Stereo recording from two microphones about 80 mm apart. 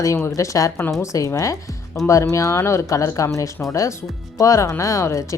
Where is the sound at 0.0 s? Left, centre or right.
Left.